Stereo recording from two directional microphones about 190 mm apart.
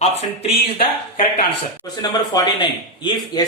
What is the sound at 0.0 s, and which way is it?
Speech, 35° left (ahead or behind).